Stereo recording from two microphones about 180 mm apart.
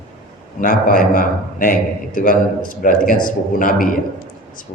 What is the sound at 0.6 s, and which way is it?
A man's voice, 50° left (ahead or behind).